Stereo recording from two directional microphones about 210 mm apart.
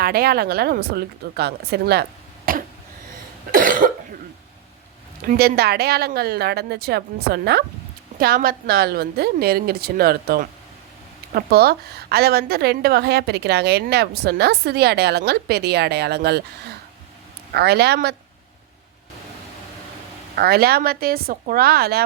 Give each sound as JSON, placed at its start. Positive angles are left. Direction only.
{"t": 0.0, "sound": "a woman's voice", "side_deg": -45}
{"t": 2.5, "sound": "cough", "side_deg": -45}
{"t": 5.4, "sound": "a woman's voice", "side_deg": -50}
{"t": 17.5, "sound": "a woman's voice", "side_deg": -50}
{"t": 20.3, "sound": "a woman's voice", "side_deg": -45}